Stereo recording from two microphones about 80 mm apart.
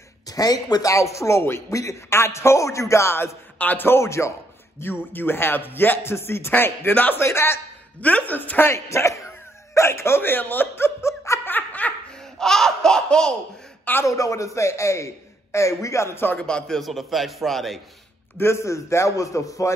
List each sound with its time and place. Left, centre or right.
0.3 s speech: left
0.9 s a man's voice: left
8.0 s speech: centre; by 11.4 s left
11.4 s laughter: left
12.2 s laughter: centre
14.0 s a man's voice: left
16.3 s a man's voice: centre
18.4 s a man's voice: left